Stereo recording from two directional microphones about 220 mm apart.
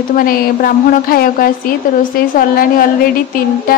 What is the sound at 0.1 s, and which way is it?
A woman's voice, 40° left (ahead or behind).